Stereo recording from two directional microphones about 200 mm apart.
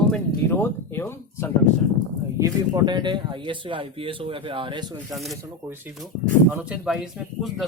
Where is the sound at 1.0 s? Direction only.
10° left (ahead or behind).